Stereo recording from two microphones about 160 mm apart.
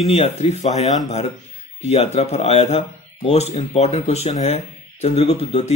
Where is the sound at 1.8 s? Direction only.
40° left (ahead or behind).